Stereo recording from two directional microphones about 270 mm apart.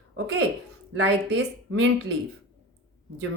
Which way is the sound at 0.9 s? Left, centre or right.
Right.